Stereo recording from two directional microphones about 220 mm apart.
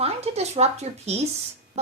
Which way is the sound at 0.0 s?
30° right (ahead or behind).